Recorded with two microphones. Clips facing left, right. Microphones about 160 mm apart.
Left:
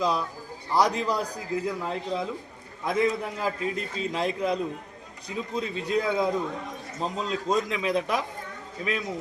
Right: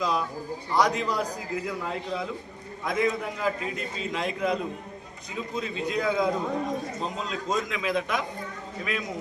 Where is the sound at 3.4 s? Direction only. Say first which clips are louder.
Even; 35° left (ahead or behind).